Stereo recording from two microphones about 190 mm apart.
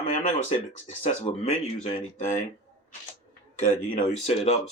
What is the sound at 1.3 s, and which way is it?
Speech, 40° left (ahead or behind).